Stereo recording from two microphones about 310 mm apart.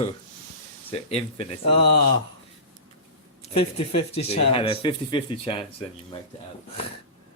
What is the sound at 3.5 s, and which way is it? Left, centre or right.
Speech, left.